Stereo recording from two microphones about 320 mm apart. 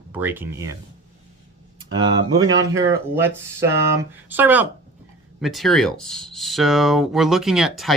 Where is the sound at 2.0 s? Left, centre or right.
Centre.